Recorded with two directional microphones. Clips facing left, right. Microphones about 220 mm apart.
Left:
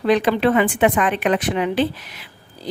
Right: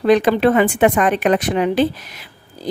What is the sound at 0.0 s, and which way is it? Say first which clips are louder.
Speech: right 3 dB; 45° right (ahead or behind).